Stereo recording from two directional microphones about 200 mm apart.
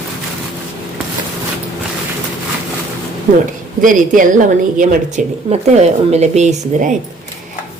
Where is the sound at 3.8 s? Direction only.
40° right (ahead or behind).